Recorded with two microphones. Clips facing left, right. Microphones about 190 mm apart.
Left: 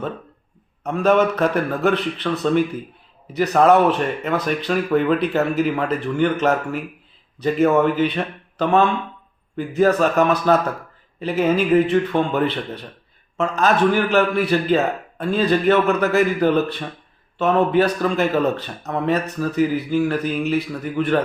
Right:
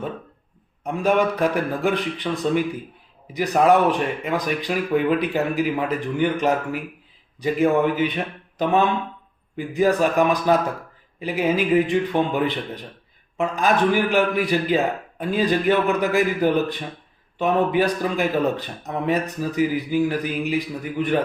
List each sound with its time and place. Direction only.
0.9 s speech: 15° right (ahead or behind)